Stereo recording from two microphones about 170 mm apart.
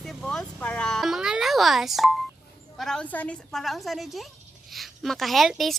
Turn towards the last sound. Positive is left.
turn(degrees=0)  # may be behind; listen again after turning